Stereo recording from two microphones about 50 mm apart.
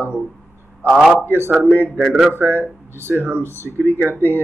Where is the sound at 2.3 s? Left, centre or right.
Right.